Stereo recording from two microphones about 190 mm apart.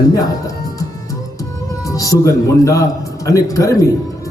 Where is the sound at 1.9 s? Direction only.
15° left (ahead or behind).